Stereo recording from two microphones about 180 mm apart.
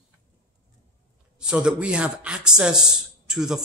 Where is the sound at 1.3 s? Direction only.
5° right (ahead or behind).